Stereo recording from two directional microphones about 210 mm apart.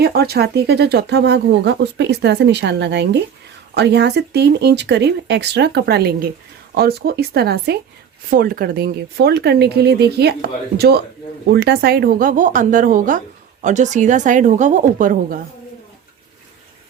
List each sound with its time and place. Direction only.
0.0 s speech: 50° right (ahead or behind)